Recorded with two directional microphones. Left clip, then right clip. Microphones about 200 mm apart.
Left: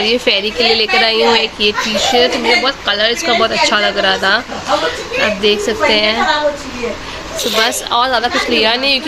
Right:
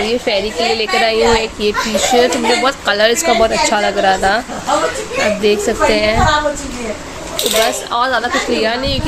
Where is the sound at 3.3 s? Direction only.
5° right (ahead or behind).